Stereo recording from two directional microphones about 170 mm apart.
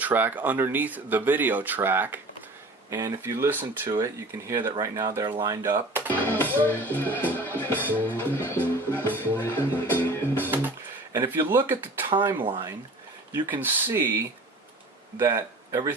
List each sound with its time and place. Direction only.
0.0 s speech: 10° right (ahead or behind)
6.1 s music: 10° left (ahead or behind)
6.7 s speech: 10° left (ahead or behind)
8.1 s music: 10° left (ahead or behind)
10.5 s a sound: 10° right (ahead or behind)
11.4 s speech: 15° right (ahead or behind)
12.0 s speech: 25° right (ahead or behind)
13.3 s speech: 15° right (ahead or behind)
15.2 s speech: 15° right (ahead or behind)